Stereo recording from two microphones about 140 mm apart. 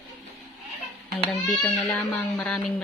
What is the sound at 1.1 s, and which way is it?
A child's voice, 10° left (ahead or behind).